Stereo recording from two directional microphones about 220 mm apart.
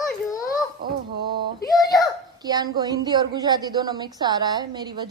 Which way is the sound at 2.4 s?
15° right (ahead or behind).